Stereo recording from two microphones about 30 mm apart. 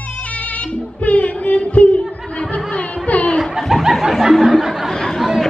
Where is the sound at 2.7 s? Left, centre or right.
Left.